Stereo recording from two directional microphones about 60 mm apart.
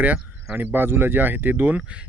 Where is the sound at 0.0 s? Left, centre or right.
Right.